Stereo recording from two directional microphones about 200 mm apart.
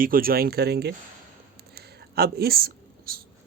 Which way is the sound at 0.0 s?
45° right (ahead or behind).